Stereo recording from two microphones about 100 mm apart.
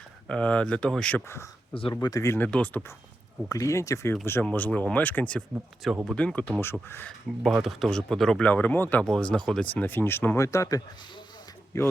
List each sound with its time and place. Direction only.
0.3 s speech: 10° left (ahead or behind)
1.7 s speech: 60° left (ahead or behind)
2.0 s speech: 35° left (ahead or behind)
2.3 s speech: 15° left (ahead or behind)
3.5 s speech: 30° left (ahead or behind)
4.5 s speech: 15° left (ahead or behind)
5.8 s speech: centre (ahead or behind)
6.1 s speech: 15° left (ahead or behind)
7.4 s speech: centre (ahead or behind)
8.4 s speech: 15° left (ahead or behind)
9.0 s speech: 5° left (ahead or behind); by 11.9 s 30° left (ahead or behind)